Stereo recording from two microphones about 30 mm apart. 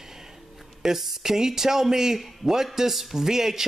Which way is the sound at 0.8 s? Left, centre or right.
Centre.